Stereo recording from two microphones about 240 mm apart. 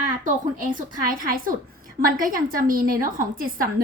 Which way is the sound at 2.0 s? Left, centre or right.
Right.